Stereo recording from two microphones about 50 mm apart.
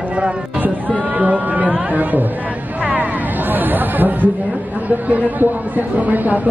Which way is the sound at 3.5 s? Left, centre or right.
Right.